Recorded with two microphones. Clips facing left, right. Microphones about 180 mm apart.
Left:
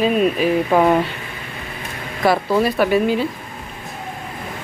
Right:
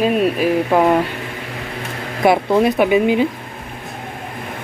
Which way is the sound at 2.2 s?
20° right (ahead or behind).